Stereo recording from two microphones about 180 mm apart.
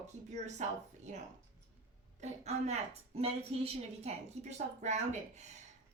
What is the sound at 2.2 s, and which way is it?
A woman's voice, 40° right (ahead or behind).